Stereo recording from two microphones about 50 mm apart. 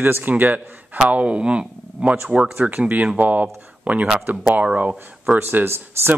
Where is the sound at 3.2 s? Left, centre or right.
Right.